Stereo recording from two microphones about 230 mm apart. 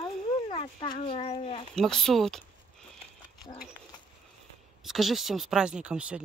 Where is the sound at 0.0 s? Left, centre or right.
Centre.